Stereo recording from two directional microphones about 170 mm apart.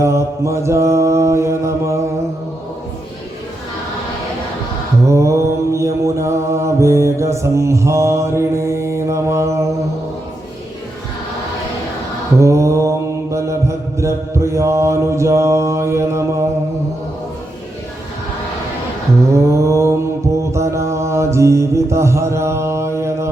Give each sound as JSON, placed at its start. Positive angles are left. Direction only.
{"t": 0.0, "sound": "mantra", "side_deg": -15}
{"t": 5.0, "sound": "mantra", "side_deg": -15}
{"t": 12.4, "sound": "mantra", "side_deg": -15}
{"t": 19.3, "sound": "mantra", "side_deg": -15}